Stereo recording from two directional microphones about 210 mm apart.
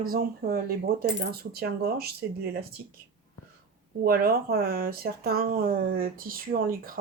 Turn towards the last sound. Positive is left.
turn(degrees=-40)  # may be behind; listen again after turning